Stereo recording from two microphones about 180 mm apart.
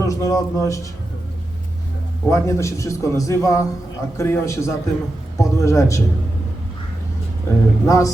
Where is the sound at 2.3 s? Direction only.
15° left (ahead or behind).